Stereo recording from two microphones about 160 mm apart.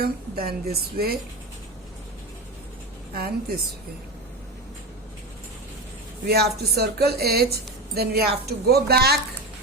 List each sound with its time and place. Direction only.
0.0 s a woman's voice: 75° right (ahead or behind)
3.2 s a woman's voice: 75° right (ahead or behind)
6.2 s speech: 90° right